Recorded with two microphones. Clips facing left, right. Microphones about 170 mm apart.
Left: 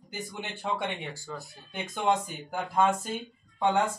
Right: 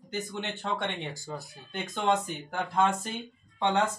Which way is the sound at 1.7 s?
10° left (ahead or behind).